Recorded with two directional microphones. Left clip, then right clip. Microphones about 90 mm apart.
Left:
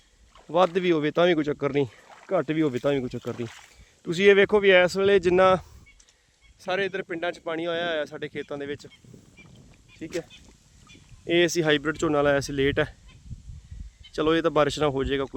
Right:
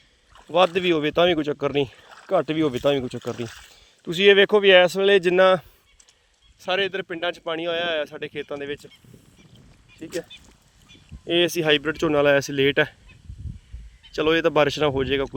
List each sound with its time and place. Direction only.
0.5 s speech: 35° left (ahead or behind)
6.6 s speech: 10° right (ahead or behind)
11.3 s speech: 10° left (ahead or behind); by 13.0 s 10° right (ahead or behind)
14.1 s speech: 5° right (ahead or behind)